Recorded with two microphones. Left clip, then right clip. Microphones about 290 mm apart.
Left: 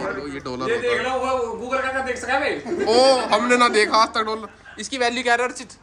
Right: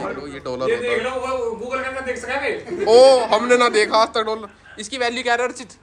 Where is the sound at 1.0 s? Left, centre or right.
Left.